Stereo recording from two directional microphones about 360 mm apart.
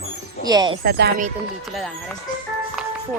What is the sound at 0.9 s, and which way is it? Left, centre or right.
Speech, right.